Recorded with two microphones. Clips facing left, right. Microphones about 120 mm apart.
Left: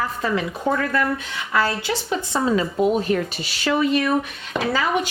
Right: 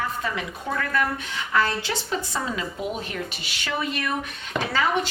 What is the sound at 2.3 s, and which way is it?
A woman's voice, 40° left (ahead or behind).